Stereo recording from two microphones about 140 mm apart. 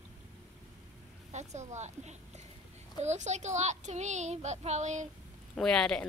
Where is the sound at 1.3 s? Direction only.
55° right (ahead or behind).